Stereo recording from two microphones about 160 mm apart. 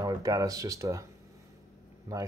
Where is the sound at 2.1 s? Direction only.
20° right (ahead or behind).